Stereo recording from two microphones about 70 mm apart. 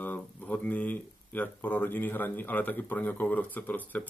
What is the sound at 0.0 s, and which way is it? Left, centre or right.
Speech, left.